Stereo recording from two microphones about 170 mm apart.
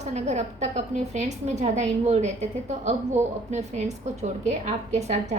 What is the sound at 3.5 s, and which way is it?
A woman's voice, 40° right (ahead or behind).